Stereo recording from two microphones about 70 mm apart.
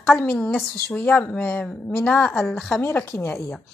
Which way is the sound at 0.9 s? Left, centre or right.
Left.